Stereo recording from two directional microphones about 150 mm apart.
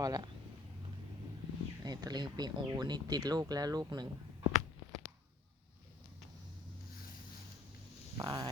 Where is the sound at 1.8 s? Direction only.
25° right (ahead or behind).